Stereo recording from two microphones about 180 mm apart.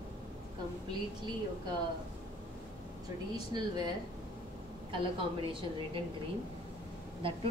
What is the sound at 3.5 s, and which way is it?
Speech, 25° right (ahead or behind).